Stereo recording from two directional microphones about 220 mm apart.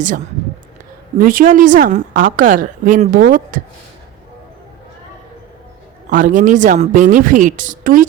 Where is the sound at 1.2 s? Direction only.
40° right (ahead or behind).